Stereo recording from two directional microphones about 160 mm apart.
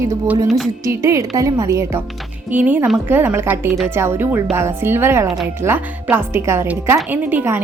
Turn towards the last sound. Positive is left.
turn(degrees=-15)  # may be behind; listen again after turning